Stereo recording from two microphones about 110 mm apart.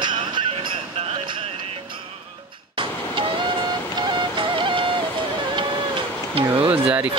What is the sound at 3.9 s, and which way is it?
Music, 45° right (ahead or behind).